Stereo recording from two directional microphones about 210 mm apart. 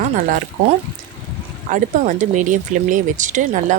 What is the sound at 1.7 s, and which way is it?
Speech, 35° right (ahead or behind).